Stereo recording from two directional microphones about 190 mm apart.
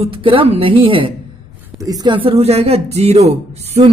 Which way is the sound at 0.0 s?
30° right (ahead or behind).